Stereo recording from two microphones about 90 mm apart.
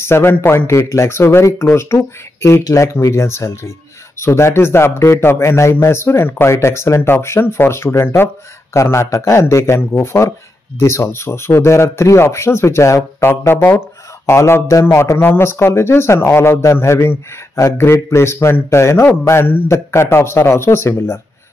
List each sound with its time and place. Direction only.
0.0 s speech: 25° left (ahead or behind)
15.1 s speech: 25° left (ahead or behind)